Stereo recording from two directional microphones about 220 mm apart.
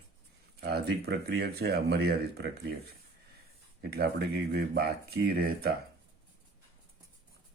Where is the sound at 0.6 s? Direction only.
45° right (ahead or behind).